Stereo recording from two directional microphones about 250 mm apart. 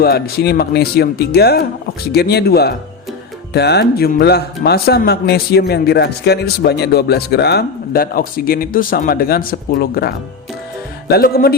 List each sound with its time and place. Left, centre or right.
0.0 s speech: left